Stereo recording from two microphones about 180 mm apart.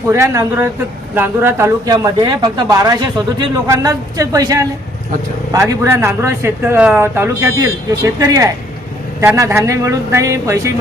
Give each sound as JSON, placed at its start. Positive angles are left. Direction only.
{"t": 0.1, "sound": "a man's voice", "side_deg": -15}